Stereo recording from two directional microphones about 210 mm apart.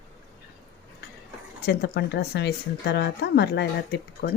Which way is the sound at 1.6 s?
50° left (ahead or behind).